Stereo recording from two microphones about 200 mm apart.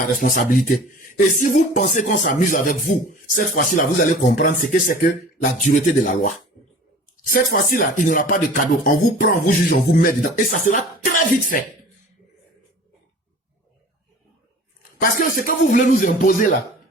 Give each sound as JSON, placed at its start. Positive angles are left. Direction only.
{"t": 0.2, "sound": "a man's voice", "side_deg": 45}
{"t": 15.4, "sound": "a man's voice", "side_deg": 40}